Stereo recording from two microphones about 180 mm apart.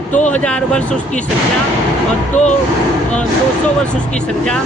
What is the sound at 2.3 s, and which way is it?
Speech, 40° left (ahead or behind).